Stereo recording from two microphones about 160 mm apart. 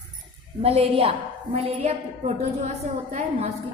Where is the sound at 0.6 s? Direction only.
40° right (ahead or behind).